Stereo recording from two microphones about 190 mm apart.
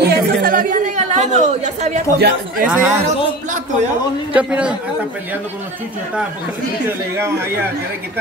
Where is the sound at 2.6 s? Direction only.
10° right (ahead or behind).